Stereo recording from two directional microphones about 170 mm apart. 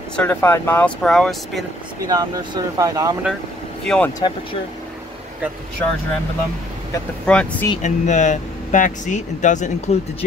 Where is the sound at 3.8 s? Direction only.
5° left (ahead or behind).